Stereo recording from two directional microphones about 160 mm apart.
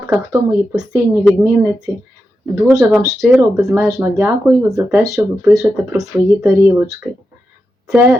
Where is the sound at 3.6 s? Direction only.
15° right (ahead or behind).